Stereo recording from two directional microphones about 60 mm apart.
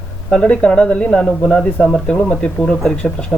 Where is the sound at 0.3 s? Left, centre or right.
Centre.